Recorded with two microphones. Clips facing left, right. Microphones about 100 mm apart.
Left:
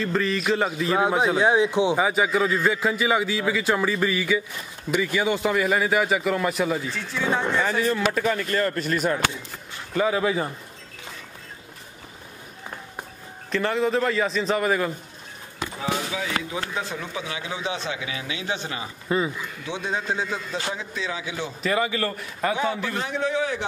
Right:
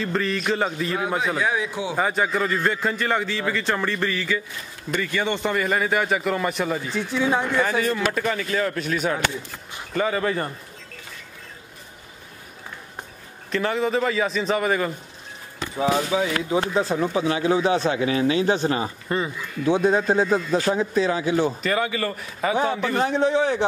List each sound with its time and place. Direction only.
0.0 s a man's voice: centre (ahead or behind)
1.4 s speech: 25° left (ahead or behind)
2.0 s a man's voice: 5° left (ahead or behind)
6.9 s speech: 15° right (ahead or behind)
7.6 s a man's voice: centre (ahead or behind)
13.5 s a man's voice: centre (ahead or behind)
16.1 s speech: 30° right (ahead or behind)
19.0 s a man's voice: 5° left (ahead or behind)
19.6 s a man's voice: 45° right (ahead or behind)
21.6 s a man's voice: centre (ahead or behind)
22.9 s speech: 35° right (ahead or behind)